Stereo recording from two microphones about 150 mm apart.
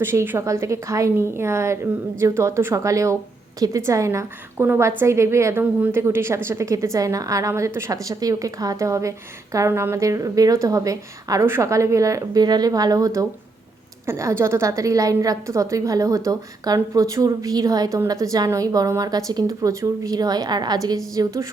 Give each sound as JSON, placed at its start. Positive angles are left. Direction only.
{"t": 0.0, "sound": "a woman's voice", "side_deg": -15}